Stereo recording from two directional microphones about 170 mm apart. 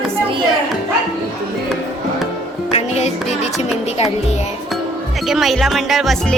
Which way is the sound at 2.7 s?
40° left (ahead or behind).